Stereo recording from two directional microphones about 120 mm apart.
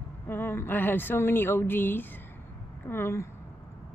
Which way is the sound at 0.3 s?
20° left (ahead or behind).